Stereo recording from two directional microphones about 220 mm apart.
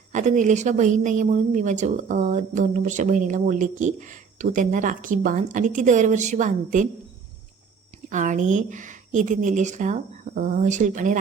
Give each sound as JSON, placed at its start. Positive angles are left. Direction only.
{"t": 0.1, "sound": "a woman's voice", "side_deg": -35}
{"t": 8.1, "sound": "a woman's voice", "side_deg": -35}